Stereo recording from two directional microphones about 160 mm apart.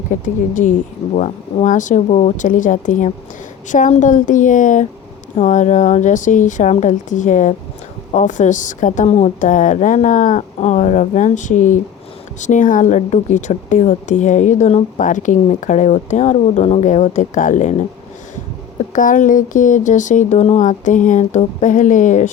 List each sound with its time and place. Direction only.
0.1 s speech: 50° left (ahead or behind)
18.9 s speech: 55° left (ahead or behind)